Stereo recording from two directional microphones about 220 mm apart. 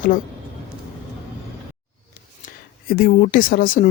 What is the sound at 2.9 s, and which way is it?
Speech, 40° left (ahead or behind).